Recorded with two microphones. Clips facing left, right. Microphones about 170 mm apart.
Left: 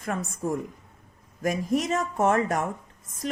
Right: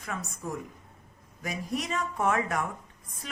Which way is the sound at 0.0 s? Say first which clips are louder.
Left 7 dB; 50° left (ahead or behind).